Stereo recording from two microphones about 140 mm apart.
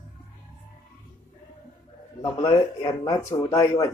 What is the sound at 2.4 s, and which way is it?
Speech, 30° left (ahead or behind).